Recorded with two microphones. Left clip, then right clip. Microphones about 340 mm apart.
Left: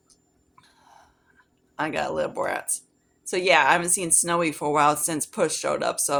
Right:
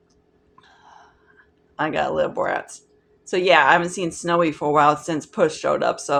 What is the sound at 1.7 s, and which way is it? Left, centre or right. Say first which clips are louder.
A woman's voice: right 5 dB; left.